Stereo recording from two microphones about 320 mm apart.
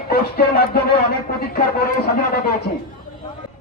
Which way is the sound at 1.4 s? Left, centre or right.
Left.